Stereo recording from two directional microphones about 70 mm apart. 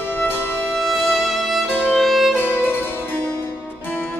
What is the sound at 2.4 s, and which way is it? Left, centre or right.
Music, left.